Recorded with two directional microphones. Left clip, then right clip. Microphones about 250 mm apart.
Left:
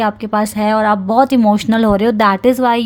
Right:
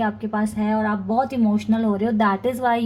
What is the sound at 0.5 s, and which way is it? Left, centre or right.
A woman's voice, left.